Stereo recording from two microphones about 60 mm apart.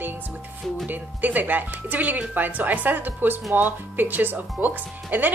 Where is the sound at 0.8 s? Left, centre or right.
Right.